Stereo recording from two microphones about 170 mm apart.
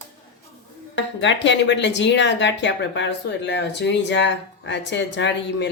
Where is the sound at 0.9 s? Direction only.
90° left.